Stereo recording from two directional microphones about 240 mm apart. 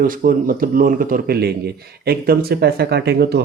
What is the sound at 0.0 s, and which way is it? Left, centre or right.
Speech, right.